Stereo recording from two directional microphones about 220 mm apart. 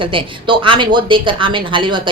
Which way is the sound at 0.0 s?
25° right (ahead or behind).